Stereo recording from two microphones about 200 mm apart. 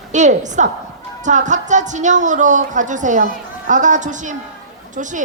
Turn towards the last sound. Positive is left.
turn(degrees=-40)  # may be behind; listen again after turning